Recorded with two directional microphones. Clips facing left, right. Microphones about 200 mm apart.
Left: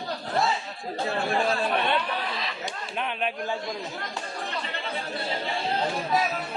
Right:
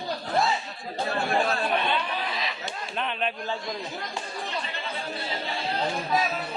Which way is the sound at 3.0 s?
10° left (ahead or behind).